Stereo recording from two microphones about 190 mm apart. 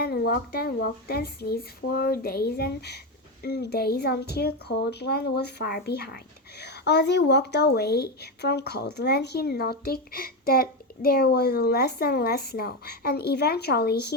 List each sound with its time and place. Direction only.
0.0 s speech: 55° left (ahead or behind)